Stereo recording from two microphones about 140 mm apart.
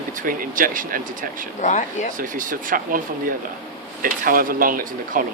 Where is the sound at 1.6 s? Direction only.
60° left (ahead or behind).